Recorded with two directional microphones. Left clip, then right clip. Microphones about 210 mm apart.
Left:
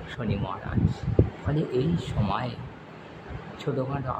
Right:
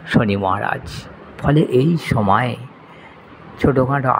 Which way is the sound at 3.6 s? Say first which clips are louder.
Right 14 dB; 30° right (ahead or behind).